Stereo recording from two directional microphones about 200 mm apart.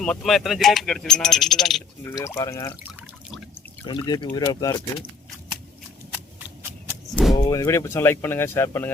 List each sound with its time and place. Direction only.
0.0 s speech: centre (ahead or behind)
2.1 s speech: 15° left (ahead or behind)
2.8 s water: 5° right (ahead or behind)
3.8 s speech: 20° left (ahead or behind)
7.1 s vehicle: centre (ahead or behind)
7.3 s speech: 20° left (ahead or behind)